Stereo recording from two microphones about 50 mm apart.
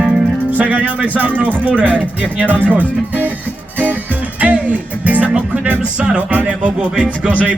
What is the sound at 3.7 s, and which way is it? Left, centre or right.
Music, right.